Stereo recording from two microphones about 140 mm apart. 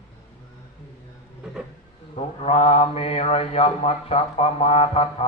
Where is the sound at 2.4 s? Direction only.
45° left (ahead or behind).